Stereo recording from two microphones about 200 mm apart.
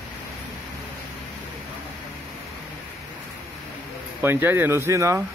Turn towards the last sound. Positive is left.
turn(degrees=-15)  # may be behind; listen again after turning